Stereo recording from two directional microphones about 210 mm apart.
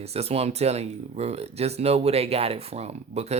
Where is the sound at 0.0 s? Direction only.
30° right (ahead or behind).